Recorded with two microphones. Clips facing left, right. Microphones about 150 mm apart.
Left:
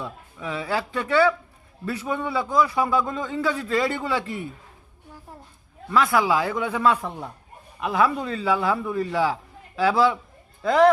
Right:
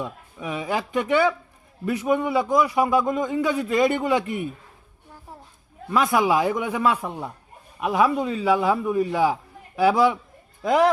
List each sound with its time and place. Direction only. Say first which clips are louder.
0.0 s a man's voice: right 2 dB; 15° right (ahead or behind)
5.9 s a man's voice: right 1 dB; 20° right (ahead or behind)